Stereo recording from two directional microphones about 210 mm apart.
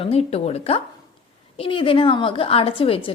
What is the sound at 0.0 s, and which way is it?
A woman's voice, 30° left (ahead or behind).